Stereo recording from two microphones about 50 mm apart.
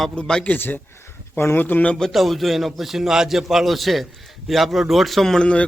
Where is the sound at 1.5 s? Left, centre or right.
Left.